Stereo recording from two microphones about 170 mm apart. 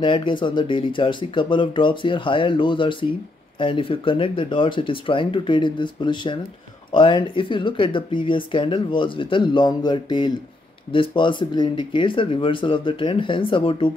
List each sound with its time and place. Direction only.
0.0 s speech: 30° left (ahead or behind)